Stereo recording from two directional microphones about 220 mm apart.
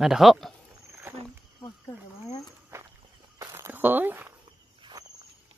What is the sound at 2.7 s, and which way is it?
Walk, 10° right (ahead or behind).